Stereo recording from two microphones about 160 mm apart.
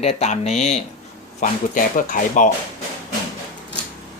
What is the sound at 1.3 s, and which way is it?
Speech, 60° left (ahead or behind).